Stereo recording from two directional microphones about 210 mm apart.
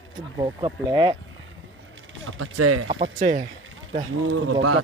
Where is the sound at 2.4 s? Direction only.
90° right.